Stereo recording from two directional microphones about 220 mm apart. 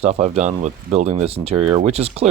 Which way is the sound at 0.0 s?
30° right (ahead or behind).